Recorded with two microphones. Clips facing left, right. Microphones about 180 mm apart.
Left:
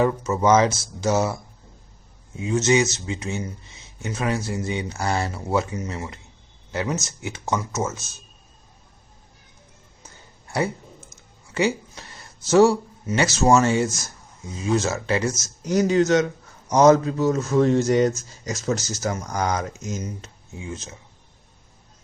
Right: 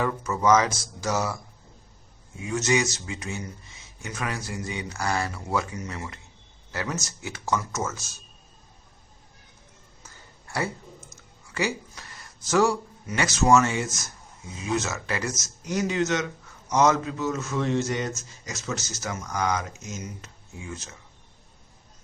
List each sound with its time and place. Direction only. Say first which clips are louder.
0.0 s speech: left 5 dB; 25° left (ahead or behind)
2.4 s speech: left 5 dB; 25° left (ahead or behind)
10.0 s a sound: left 2 dB; 20° left (ahead or behind)
11.5 s speech: left 6 dB; 25° left (ahead or behind)
20.2 s speech: left 4 dB; 20° left (ahead or behind)